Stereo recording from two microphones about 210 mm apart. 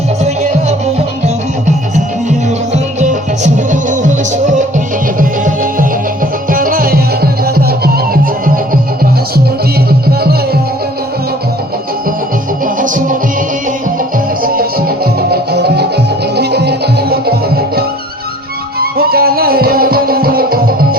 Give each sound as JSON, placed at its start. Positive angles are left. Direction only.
{"t": 3.0, "sound": "music", "side_deg": -35}
{"t": 6.5, "sound": "music", "side_deg": -40}
{"t": 12.6, "sound": "music", "side_deg": -40}
{"t": 14.4, "sound": "music", "side_deg": -45}
{"t": 18.8, "sound": "music", "side_deg": -45}